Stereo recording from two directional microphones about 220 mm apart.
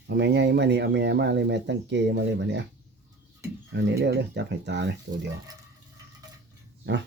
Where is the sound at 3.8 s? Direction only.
50° right (ahead or behind).